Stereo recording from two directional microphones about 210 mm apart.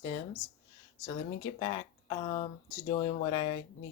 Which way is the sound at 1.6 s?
20° left (ahead or behind).